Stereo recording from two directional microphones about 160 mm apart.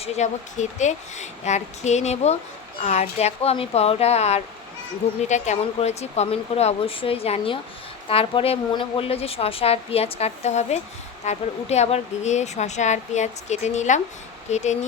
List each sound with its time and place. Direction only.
0.0 s a woman's voice: 45° left (ahead or behind)